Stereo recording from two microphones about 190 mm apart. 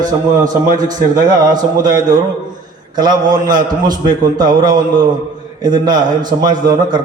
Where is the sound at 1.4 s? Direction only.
20° right (ahead or behind).